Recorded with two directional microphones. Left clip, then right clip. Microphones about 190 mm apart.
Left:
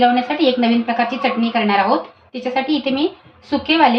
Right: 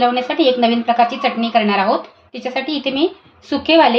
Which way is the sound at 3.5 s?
60° right (ahead or behind).